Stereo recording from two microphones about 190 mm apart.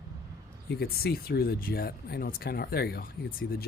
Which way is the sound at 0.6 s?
55° left (ahead or behind).